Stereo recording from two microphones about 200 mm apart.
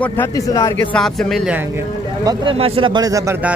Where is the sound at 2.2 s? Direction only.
25° right (ahead or behind).